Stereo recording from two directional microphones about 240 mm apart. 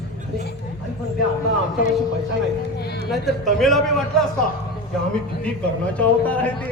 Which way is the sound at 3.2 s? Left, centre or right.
Centre.